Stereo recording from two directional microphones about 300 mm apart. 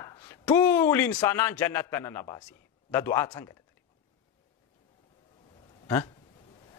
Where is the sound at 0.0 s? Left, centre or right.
Centre.